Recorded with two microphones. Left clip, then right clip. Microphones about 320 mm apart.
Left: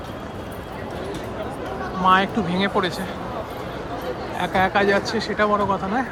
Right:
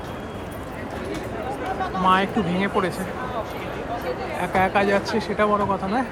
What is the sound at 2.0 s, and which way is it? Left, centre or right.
Speech, centre.